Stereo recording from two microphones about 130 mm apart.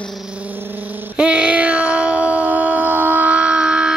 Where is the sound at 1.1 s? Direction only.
10° right (ahead or behind).